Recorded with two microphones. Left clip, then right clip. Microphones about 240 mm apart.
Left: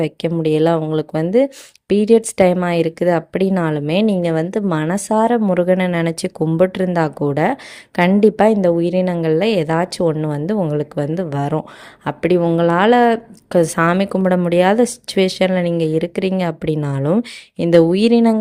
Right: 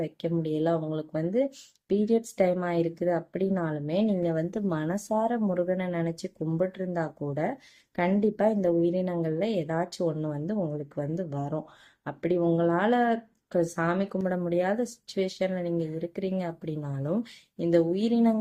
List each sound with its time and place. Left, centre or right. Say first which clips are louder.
0.0 s speech: left 12 dB; left